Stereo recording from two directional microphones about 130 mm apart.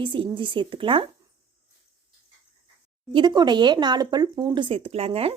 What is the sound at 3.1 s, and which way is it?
Speech, 35° right (ahead or behind).